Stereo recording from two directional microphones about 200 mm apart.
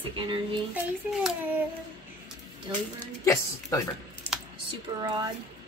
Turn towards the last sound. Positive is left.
turn(degrees=-20)  # may be behind; listen again after turning